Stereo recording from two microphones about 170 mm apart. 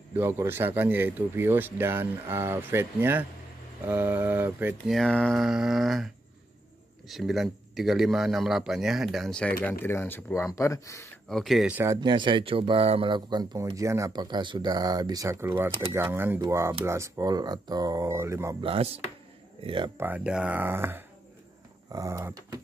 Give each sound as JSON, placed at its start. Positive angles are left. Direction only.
{"t": 0.1, "sound": "speech", "side_deg": -15}
{"t": 4.9, "sound": "speech", "side_deg": 5}
{"t": 11.2, "sound": "speech", "side_deg": 0}
{"t": 11.8, "sound": "speech", "side_deg": -20}
{"t": 18.6, "sound": "speech", "side_deg": -35}
{"t": 20.0, "sound": "speech", "side_deg": -10}